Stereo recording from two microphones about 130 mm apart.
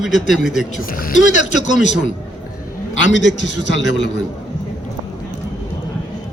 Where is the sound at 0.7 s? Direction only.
90° left.